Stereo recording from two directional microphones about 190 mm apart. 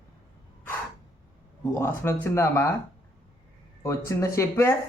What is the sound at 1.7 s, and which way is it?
Speech, 15° left (ahead or behind).